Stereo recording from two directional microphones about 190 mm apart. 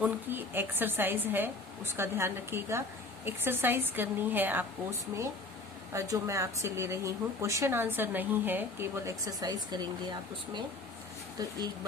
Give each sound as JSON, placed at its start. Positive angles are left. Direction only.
{"t": 0.0, "sound": "a woman's voice", "side_deg": -10}